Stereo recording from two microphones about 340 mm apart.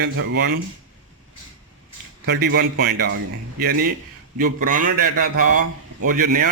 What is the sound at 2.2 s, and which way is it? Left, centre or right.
A man's voice, right.